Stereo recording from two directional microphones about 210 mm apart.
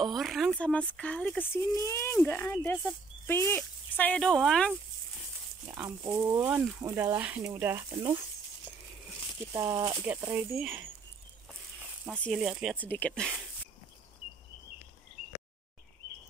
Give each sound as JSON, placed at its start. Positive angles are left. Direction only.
{"t": 0.0, "sound": "speech", "side_deg": 0}
{"t": 5.7, "sound": "speech", "side_deg": -10}
{"t": 9.5, "sound": "speech", "side_deg": -15}
{"t": 12.1, "sound": "speech", "side_deg": 5}
{"t": 12.7, "sound": "speech", "side_deg": 5}